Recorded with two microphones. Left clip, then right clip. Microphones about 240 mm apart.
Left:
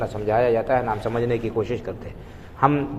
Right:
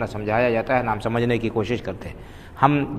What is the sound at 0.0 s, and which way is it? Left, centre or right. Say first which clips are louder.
A man's voice: left 1 dB; right.